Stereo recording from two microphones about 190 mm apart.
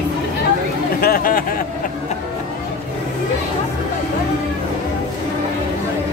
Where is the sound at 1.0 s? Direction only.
50° left (ahead or behind).